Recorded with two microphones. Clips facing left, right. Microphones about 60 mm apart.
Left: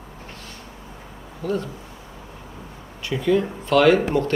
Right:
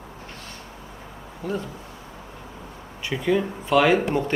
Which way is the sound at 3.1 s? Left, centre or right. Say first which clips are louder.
Left 2 dB; centre.